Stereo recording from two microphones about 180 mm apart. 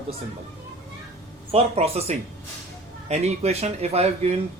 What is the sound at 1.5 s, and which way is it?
Speech, 35° right (ahead or behind).